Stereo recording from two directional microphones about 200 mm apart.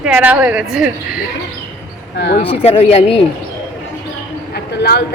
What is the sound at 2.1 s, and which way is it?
Speech, 55° left (ahead or behind).